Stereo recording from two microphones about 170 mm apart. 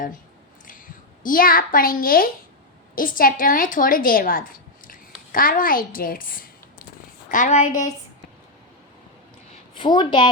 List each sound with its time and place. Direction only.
1.2 s a child's voice: 55° left (ahead or behind)
9.7 s a woman's voice: 30° left (ahead or behind)